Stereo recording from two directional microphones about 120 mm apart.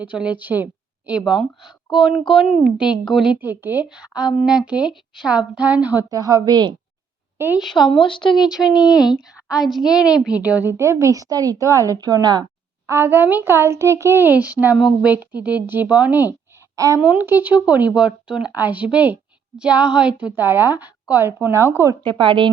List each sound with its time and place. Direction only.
0.0 s a woman's voice: 10° right (ahead or behind)
6.1 s a woman's voice: 30° right (ahead or behind)
7.3 s a woman's voice: 15° right (ahead or behind)
7.6 s a woman's voice: centre (ahead or behind)
7.9 s speech: 45° left (ahead or behind)
8.9 s a woman's voice: 5° right (ahead or behind); by 12.5 s 35° right (ahead or behind)
12.9 s speech: 20° right (ahead or behind)
16.7 s a woman's voice: 25° right (ahead or behind)
17.0 s a child's voice: 15° right (ahead or behind)
22.0 s speech: 45° right (ahead or behind)